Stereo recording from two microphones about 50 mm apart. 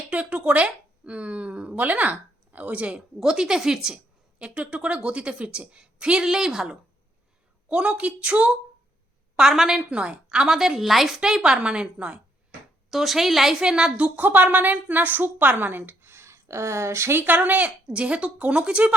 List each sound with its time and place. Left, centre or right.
0.1 s a sound: right
3.2 s a woman's voice: centre
4.4 s a woman's voice: right
7.7 s a woman's voice: right
9.5 s a woman's voice: centre
9.9 s a woman's voice: right
10.2 s a woman's voice: centre
12.9 s a woman's voice: centre
13.9 s a woman's voice: right
17.2 s a woman's voice: right